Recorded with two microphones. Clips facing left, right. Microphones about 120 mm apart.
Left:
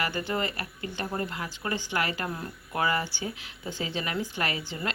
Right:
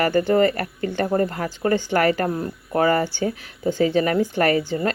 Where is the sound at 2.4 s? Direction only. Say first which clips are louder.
Right 9 dB; 40° right (ahead or behind).